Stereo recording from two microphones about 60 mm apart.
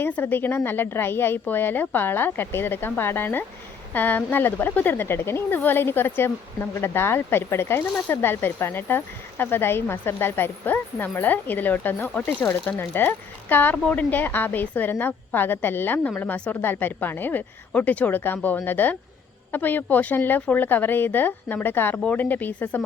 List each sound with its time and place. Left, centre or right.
0.0 s a woman's voice: left
21.9 s speech: left